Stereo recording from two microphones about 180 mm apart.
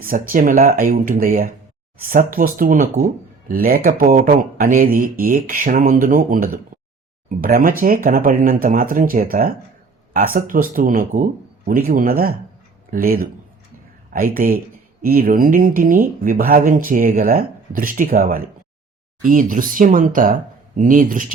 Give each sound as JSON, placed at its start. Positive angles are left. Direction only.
{"t": 0.0, "sound": "speech", "side_deg": -50}